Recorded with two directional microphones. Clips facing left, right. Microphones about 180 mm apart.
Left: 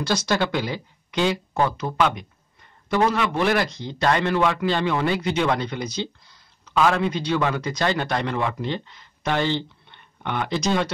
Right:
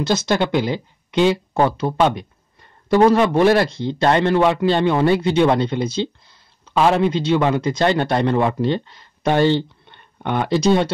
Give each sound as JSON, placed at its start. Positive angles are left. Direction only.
{"t": 0.0, "sound": "a man's voice", "side_deg": -25}